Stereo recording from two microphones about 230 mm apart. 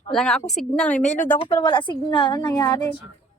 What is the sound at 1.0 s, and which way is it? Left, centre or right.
Speech, left.